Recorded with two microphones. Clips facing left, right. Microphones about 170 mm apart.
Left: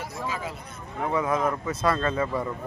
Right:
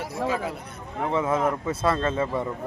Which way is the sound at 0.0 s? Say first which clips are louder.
Right 5 dB; 65° right (ahead or behind).